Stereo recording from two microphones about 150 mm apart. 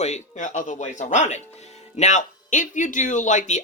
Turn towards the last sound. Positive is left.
turn(degrees=55)  # may be behind; listen again after turning